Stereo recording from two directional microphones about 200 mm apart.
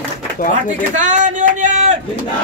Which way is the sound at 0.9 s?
35° right (ahead or behind).